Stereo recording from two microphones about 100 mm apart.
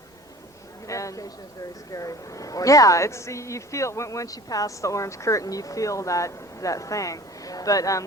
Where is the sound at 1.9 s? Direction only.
35° left (ahead or behind).